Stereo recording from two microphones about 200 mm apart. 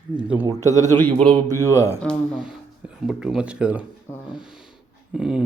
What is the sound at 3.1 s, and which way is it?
Speech, 5° right (ahead or behind).